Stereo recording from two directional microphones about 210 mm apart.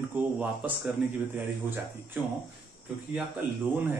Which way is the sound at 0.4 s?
5° right (ahead or behind).